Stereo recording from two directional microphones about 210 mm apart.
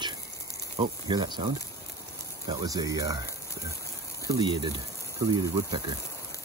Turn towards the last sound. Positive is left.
turn(degrees=-20)  # may be behind; listen again after turning